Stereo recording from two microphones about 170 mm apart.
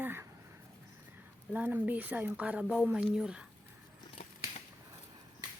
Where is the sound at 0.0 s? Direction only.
15° right (ahead or behind).